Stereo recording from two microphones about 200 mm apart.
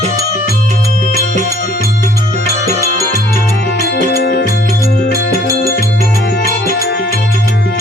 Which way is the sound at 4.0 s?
50° left (ahead or behind).